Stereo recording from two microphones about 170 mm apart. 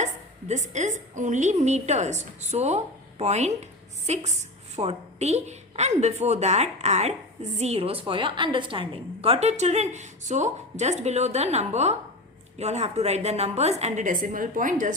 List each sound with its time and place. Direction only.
0.0 s a woman's voice: 45° right (ahead or behind)